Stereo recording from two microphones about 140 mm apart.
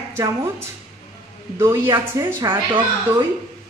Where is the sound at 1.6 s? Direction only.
20° right (ahead or behind).